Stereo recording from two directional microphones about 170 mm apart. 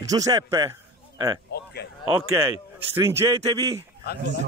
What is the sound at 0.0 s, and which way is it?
A man's voice, 20° right (ahead or behind).